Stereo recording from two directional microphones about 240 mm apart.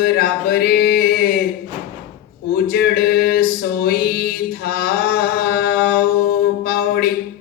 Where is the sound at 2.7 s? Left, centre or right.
Left.